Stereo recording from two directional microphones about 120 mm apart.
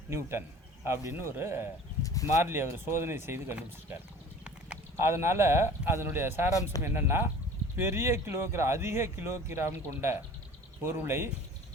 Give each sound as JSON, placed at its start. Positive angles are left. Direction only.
{"t": 0.1, "sound": "speech", "side_deg": -20}
{"t": 2.0, "sound": "a sound", "side_deg": 30}
{"t": 2.4, "sound": "speech", "side_deg": -20}